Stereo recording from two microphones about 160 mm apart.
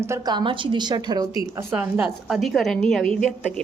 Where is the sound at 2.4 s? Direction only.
Centre (ahead or behind).